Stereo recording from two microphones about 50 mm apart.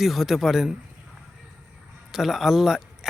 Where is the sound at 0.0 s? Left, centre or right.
Centre.